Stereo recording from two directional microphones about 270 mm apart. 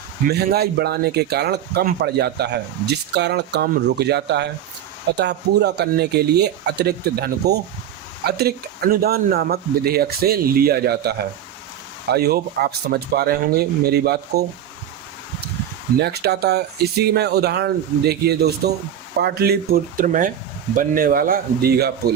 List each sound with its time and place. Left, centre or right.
0.3 s speech: right
12.1 s speech: right
16.0 s speech: right